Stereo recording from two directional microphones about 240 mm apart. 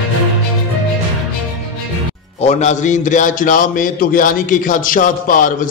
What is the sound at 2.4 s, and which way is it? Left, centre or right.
A man's voice, left.